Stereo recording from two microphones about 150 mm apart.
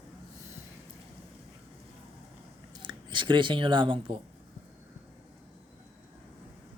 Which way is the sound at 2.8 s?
30° right (ahead or behind).